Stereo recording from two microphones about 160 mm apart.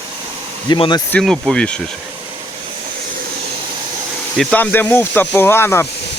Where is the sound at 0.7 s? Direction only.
30° left (ahead or behind).